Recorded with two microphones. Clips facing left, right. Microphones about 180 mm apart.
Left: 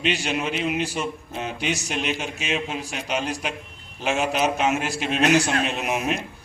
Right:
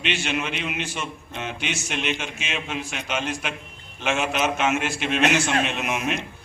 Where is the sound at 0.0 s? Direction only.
35° left (ahead or behind).